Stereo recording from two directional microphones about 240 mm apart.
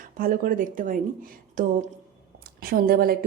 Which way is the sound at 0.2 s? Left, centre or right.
Right.